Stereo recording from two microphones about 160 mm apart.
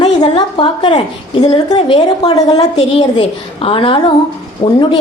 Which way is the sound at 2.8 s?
35° left (ahead or behind).